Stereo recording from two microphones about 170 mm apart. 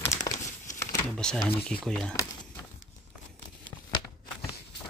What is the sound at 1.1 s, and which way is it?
Speech, 5° left (ahead or behind).